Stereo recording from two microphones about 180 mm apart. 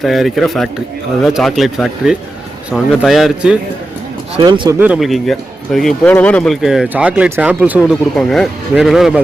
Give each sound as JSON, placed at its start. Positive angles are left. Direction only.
{"t": 0.0, "sound": "speech", "side_deg": 0}
{"t": 4.4, "sound": "speech", "side_deg": -25}
{"t": 4.8, "sound": "speech", "side_deg": -5}